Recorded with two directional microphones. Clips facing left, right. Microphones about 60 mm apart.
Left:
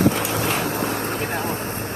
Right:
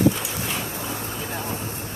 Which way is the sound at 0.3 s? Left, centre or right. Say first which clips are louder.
Left 7 dB; left.